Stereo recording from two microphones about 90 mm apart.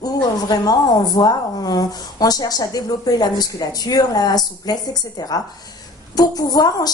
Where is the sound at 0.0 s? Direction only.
50° left (ahead or behind).